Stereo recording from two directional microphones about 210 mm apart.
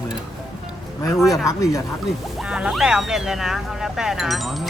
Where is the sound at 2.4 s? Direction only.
5° right (ahead or behind).